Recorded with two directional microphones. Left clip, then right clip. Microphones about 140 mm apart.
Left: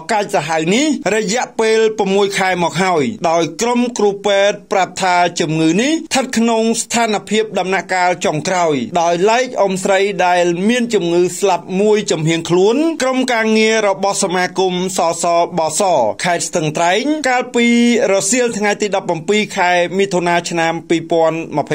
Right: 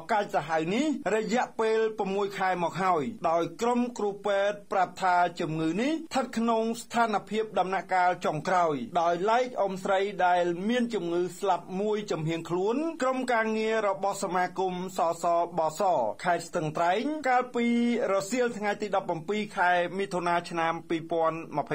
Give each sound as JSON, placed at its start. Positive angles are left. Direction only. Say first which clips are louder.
{"t": 0.1, "sound": "speech", "louder": "left 11 dB", "side_deg": 30}